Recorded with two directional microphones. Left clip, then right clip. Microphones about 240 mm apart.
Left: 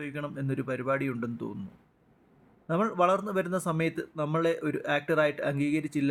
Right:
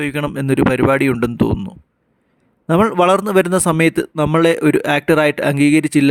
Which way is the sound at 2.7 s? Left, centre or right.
Right.